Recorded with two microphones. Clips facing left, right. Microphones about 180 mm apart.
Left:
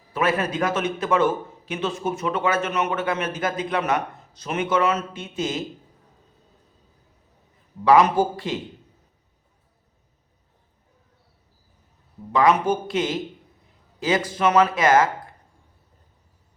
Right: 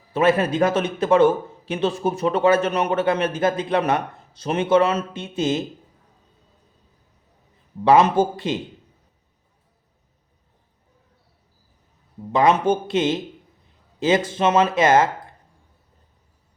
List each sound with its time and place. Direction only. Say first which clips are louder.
0.1 s a man's voice: right 5 dB; 25° right (ahead or behind)
7.9 s speech: right 1 dB; 25° right (ahead or behind)
12.3 s speech: right 2 dB; 25° right (ahead or behind)